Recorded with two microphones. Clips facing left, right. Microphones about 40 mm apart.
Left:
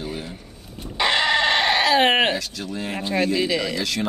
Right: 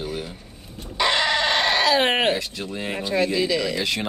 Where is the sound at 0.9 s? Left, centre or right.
Centre.